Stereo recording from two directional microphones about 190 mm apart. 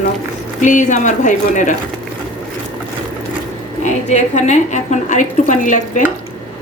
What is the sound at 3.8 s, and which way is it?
A woman's voice, 40° left (ahead or behind).